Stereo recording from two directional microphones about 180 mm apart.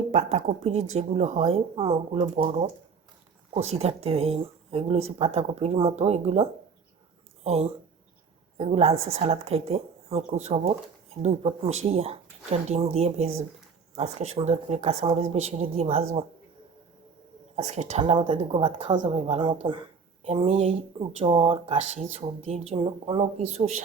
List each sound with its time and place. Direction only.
0.1 s a woman's voice: 40° right (ahead or behind)
17.6 s a woman's voice: 40° right (ahead or behind)